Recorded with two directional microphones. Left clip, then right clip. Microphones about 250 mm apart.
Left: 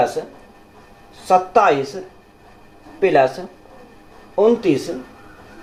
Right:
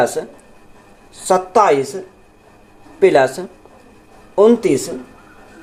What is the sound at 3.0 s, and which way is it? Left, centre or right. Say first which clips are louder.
Speech: right 3 dB; right.